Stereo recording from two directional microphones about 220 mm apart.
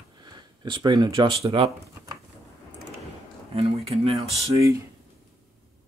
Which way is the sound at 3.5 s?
25° right (ahead or behind).